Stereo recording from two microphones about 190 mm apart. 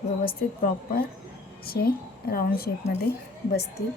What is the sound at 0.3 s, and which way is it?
A woman's voice, 50° left (ahead or behind).